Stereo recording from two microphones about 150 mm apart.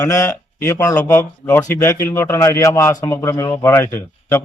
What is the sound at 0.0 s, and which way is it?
A man's voice, 20° left (ahead or behind).